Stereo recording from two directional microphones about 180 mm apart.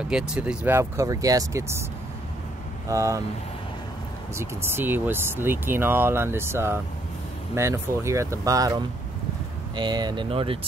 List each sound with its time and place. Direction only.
0.1 s speech: 5° right (ahead or behind)
2.9 s speech: 15° right (ahead or behind)
4.4 s speech: 10° right (ahead or behind); by 10.7 s 30° right (ahead or behind)